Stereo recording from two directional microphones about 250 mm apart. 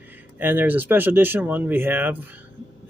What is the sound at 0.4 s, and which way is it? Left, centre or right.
Speech, centre.